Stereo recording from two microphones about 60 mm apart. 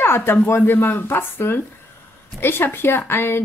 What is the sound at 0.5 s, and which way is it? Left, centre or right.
A woman's voice, left.